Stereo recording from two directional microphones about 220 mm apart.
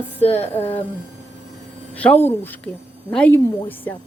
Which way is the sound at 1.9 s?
5° left (ahead or behind).